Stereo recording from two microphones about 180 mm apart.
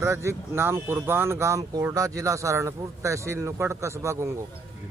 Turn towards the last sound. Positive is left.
turn(degrees=-15)  # may be behind; listen again after turning